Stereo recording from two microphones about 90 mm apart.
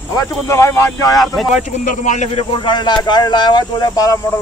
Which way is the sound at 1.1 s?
Centre (ahead or behind).